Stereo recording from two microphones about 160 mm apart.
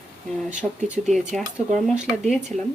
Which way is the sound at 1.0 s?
Centre (ahead or behind).